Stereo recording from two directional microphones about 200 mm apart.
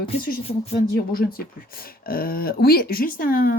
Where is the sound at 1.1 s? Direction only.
45° left (ahead or behind).